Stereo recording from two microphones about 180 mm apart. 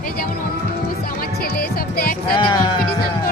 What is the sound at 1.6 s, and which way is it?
Music, 60° left (ahead or behind).